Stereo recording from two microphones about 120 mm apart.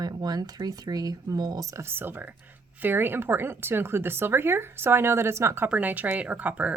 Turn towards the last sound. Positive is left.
turn(degrees=-10)  # may be behind; listen again after turning